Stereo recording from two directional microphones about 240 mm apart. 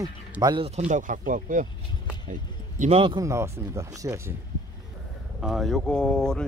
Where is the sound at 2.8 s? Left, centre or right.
Right.